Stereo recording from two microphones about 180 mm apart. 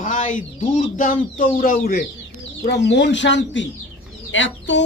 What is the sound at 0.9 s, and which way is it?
Speech, 50° left (ahead or behind).